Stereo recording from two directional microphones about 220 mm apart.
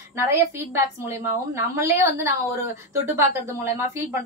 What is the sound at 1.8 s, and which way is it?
A woman's voice, 10° right (ahead or behind).